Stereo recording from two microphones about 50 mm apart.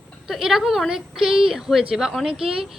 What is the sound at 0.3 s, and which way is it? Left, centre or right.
A woman's voice, centre.